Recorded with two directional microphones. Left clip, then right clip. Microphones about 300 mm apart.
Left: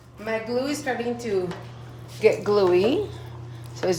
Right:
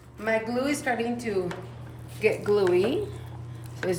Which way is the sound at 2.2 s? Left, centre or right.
Centre.